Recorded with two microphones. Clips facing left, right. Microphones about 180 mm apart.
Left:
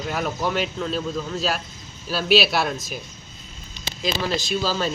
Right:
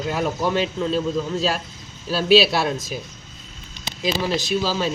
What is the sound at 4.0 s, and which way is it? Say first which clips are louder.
Speech: right 2 dB; 5° right (ahead or behind).